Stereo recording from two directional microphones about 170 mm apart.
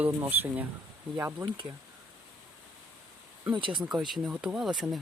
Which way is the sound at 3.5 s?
30° right (ahead or behind).